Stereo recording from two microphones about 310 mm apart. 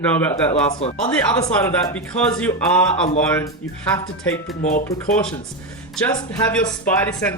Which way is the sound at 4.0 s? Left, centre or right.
Centre.